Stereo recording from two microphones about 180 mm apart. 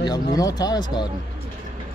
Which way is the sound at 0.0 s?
20° left (ahead or behind).